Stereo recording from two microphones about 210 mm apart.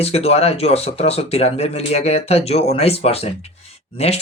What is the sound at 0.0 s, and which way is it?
Speech, 30° left (ahead or behind).